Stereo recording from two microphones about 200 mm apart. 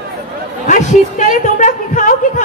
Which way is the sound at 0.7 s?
40° left (ahead or behind).